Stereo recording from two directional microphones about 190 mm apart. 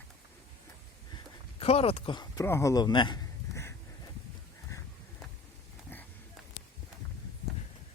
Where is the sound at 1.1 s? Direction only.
30° left (ahead or behind).